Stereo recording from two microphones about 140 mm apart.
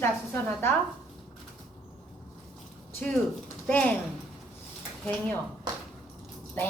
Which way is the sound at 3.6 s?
10° left (ahead or behind).